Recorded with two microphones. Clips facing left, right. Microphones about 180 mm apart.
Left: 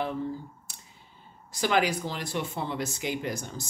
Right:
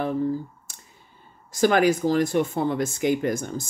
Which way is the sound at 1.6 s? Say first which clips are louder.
Right 7 dB; 50° right (ahead or behind).